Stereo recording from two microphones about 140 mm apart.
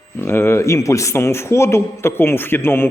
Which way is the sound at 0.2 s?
15° left (ahead or behind).